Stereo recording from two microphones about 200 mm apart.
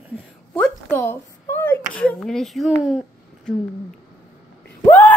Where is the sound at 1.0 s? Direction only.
10° left (ahead or behind).